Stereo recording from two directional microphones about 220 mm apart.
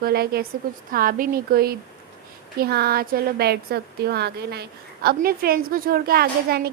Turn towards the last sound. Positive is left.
turn(degrees=-45)  # may be behind; listen again after turning